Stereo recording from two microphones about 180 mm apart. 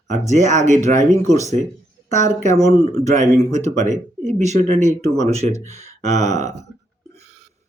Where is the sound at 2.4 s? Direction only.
40° right (ahead or behind).